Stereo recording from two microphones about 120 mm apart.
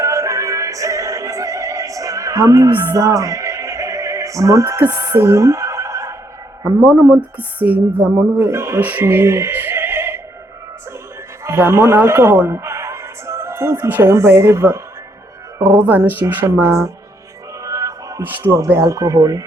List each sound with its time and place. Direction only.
0.0 s music: 25° right (ahead or behind)
2.7 s music: 40° right (ahead or behind)
3.0 s music: 25° right (ahead or behind)
7.2 s speech: 10° right (ahead or behind)
11.4 s speech: 20° right (ahead or behind)
17.6 s music: 25° right (ahead or behind)
18.2 s speech: 15° right (ahead or behind)